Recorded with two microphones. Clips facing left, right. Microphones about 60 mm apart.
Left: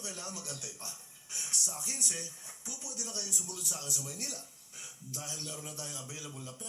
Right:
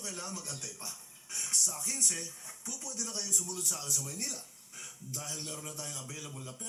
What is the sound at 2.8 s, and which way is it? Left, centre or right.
Speech, right.